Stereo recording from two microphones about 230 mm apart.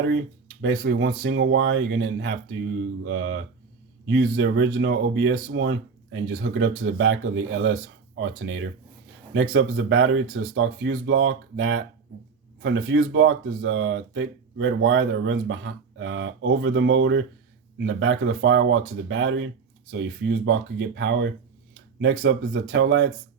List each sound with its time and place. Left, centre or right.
0.6 s speech: right